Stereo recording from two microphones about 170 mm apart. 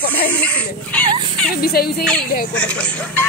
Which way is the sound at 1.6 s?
65° left (ahead or behind).